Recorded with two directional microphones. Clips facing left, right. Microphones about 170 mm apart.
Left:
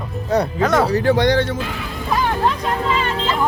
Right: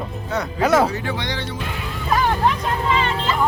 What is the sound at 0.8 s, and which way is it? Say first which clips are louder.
Speech: left 8 dB; 40° left (ahead or behind).